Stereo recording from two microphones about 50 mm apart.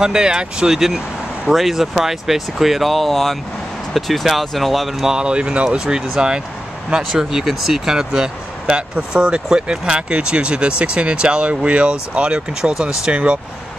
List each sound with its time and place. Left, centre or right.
0.0 s speech: centre
0.7 s vehicle: centre
1.5 s speech: centre; by 13.4 s right